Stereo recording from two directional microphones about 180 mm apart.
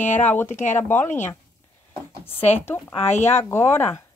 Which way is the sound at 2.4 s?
40° left (ahead or behind).